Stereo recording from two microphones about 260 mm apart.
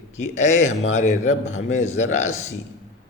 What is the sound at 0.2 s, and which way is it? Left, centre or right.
A man's voice, left.